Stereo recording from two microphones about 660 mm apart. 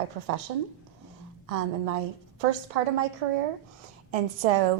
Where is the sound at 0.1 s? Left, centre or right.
Right.